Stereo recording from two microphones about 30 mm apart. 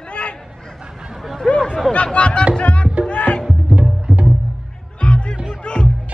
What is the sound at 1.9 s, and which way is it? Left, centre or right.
Chatter, left.